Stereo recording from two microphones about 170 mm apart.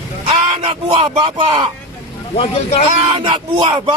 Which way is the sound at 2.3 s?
35° left (ahead or behind).